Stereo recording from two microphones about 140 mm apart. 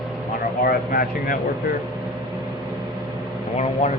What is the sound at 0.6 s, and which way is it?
Speech, 90° left.